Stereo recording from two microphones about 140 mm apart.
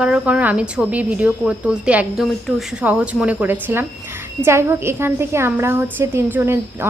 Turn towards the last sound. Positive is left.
turn(degrees=-15)  # may be behind; listen again after turning